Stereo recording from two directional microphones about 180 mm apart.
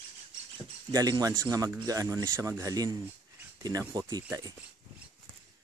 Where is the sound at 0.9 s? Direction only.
20° right (ahead or behind).